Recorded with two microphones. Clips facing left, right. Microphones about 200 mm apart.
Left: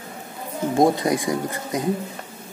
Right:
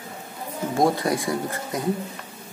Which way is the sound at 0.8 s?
20° left (ahead or behind).